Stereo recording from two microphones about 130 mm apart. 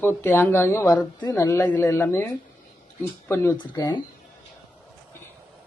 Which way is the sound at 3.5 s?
35° left (ahead or behind).